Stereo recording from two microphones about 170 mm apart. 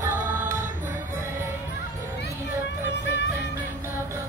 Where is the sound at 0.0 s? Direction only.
15° right (ahead or behind).